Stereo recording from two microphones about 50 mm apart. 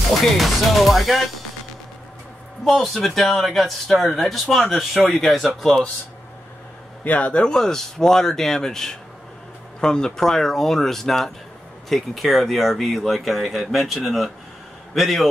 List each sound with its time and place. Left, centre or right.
0.2 s speech: centre
2.6 s speech: centre
7.1 s speech: left
7.4 s speech: centre